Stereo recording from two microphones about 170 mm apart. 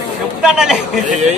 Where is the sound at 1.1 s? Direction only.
45° right (ahead or behind).